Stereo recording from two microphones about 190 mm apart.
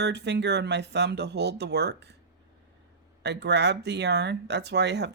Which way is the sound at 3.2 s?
65° right (ahead or behind).